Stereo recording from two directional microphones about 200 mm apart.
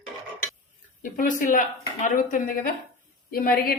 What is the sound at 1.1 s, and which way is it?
Speech, 45° left (ahead or behind).